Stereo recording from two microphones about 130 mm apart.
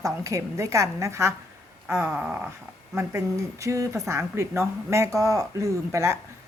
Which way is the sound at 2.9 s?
25° right (ahead or behind).